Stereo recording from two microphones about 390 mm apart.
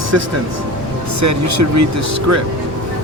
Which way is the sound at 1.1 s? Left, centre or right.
Right.